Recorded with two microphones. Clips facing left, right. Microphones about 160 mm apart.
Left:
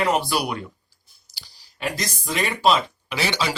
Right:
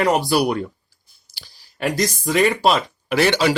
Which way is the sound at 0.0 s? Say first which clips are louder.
Right 5 dB; 40° right (ahead or behind).